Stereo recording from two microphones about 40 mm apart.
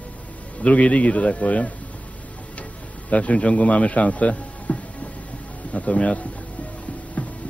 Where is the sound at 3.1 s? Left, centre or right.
Left.